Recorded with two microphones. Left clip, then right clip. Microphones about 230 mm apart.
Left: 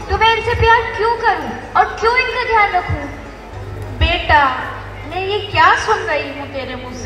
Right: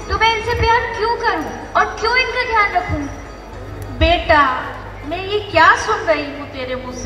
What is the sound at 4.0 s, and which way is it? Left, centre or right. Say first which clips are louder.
A woman's voice: even; right.